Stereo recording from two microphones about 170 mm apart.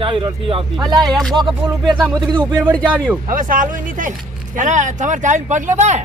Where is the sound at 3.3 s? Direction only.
55° right (ahead or behind).